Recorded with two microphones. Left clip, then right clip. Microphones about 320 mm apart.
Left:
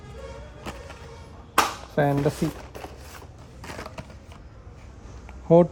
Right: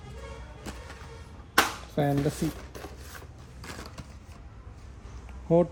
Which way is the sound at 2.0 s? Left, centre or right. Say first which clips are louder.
Left 5 dB; left.